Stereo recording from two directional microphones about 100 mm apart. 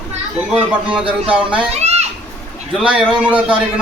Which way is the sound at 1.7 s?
90° right.